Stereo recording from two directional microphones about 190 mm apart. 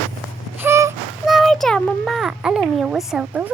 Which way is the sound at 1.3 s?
Centre (ahead or behind).